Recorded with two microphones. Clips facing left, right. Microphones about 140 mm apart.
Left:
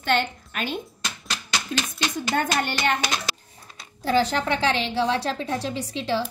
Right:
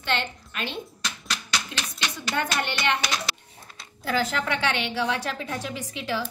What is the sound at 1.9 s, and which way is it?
A woman's voice, 45° left (ahead or behind).